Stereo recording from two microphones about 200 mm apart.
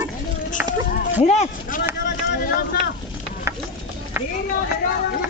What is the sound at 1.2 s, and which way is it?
Speech, 35° left (ahead or behind).